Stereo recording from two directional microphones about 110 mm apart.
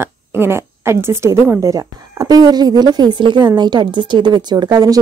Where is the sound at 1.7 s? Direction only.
35° right (ahead or behind).